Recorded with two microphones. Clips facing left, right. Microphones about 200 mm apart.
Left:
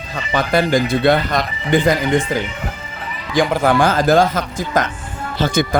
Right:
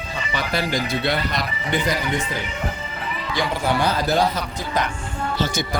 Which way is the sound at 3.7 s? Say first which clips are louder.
Left 5 dB; 50° left (ahead or behind).